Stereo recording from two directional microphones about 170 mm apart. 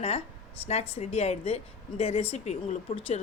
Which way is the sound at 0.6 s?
40° left (ahead or behind).